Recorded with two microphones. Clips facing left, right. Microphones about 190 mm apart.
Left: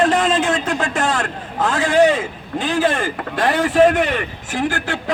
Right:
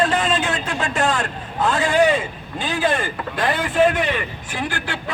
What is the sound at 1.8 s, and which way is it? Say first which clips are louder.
A man's voice: left 4 dB; 90° left.